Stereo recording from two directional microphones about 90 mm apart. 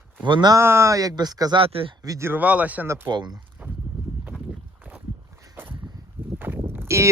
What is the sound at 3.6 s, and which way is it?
Clip-clop, 20° right (ahead or behind).